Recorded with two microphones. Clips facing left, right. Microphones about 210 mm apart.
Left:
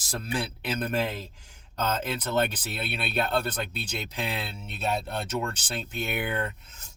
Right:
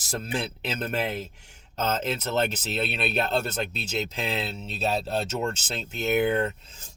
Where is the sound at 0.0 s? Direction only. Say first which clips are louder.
Right 1 dB; 20° right (ahead or behind).